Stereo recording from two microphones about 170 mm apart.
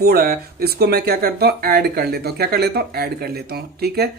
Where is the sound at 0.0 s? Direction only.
65° right (ahead or behind).